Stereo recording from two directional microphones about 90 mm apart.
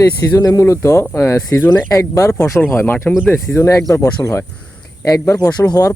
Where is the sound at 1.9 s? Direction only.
35° left (ahead or behind).